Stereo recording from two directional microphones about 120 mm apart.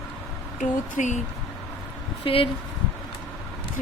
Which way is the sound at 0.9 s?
90° left.